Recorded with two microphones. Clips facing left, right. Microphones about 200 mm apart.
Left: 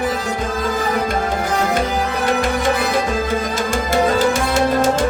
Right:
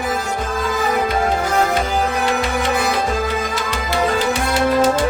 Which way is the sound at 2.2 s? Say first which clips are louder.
Left 2 dB; 45° left (ahead or behind).